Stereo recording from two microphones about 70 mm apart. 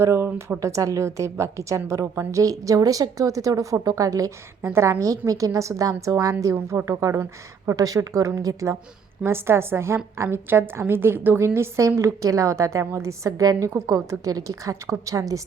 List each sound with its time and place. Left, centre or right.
0.0 s a woman's voice: right
4.6 s a woman's voice: right
9.2 s a woman's voice: right